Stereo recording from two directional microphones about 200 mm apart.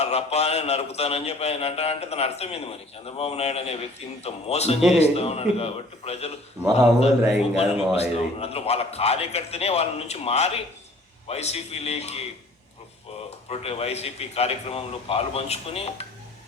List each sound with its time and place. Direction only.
0.0 s a man's voice: 30° left (ahead or behind)
7.5 s a man's voice: 30° left (ahead or behind)
13.5 s a man's voice: 30° left (ahead or behind)